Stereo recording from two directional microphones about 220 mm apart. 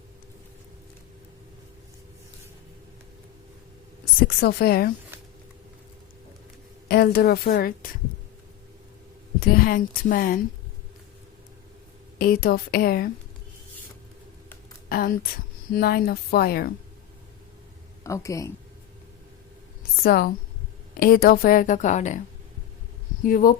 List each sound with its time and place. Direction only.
4.4 s speech: 45° left (ahead or behind)
6.8 s a woman's voice: 45° left (ahead or behind)
9.4 s a woman's voice: 45° left (ahead or behind)
12.2 s speech: 40° left (ahead or behind)
14.8 s a woman's voice: 40° left (ahead or behind)
18.0 s speech: 15° left (ahead or behind)
20.0 s a woman's voice: 45° left (ahead or behind)
23.2 s a woman's voice: 40° left (ahead or behind)